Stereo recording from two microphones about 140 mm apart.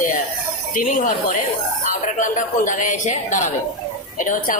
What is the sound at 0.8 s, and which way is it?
A woman's voice, 65° left (ahead or behind).